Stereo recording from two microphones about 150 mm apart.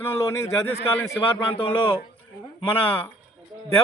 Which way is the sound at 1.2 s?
35° left (ahead or behind).